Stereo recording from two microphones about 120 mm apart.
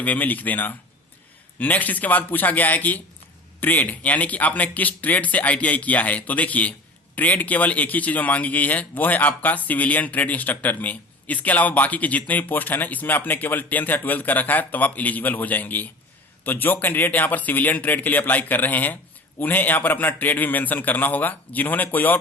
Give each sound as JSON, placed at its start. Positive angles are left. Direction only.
{"t": 0.0, "sound": "a man's voice", "side_deg": 15}